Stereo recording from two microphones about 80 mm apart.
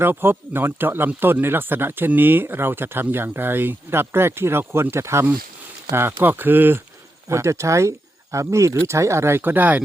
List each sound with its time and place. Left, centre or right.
0.0 s speech: right
7.3 s speech: right